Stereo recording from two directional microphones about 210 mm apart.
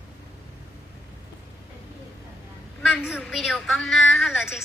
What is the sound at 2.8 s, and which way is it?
A woman's voice, centre (ahead or behind).